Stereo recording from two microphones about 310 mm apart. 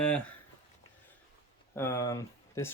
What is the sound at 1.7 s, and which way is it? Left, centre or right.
Speech, centre.